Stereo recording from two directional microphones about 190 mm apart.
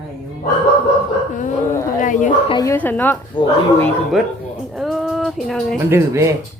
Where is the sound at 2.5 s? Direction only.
20° left (ahead or behind).